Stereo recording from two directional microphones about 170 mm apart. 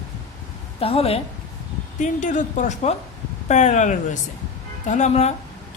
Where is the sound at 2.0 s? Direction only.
50° left (ahead or behind).